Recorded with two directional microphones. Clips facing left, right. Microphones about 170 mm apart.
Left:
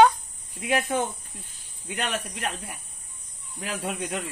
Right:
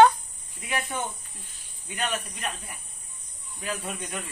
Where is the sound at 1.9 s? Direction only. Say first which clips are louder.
Left 1 dB; 90° left.